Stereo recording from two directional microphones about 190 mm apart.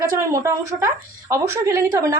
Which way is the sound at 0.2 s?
15° right (ahead or behind).